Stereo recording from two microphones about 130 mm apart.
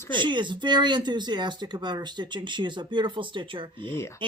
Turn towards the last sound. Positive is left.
turn(degrees=20)  # may be behind; listen again after turning